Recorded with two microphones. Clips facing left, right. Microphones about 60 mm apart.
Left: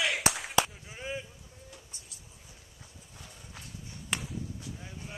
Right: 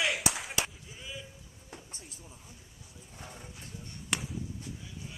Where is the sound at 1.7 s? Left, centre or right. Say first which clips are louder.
Right 3 dB; right.